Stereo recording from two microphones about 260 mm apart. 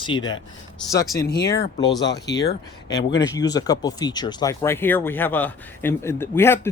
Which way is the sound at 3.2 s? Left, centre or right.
Centre.